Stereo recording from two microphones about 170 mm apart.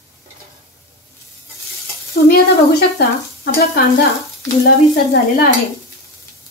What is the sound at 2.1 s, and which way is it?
Stir, 65° left (ahead or behind).